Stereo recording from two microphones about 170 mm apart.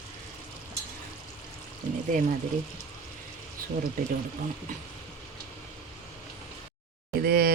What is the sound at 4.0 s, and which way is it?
Speech, 60° right (ahead or behind).